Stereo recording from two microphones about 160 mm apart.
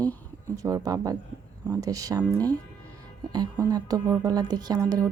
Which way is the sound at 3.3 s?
25° right (ahead or behind).